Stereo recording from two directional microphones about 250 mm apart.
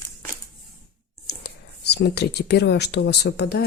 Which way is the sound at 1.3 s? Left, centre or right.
Left.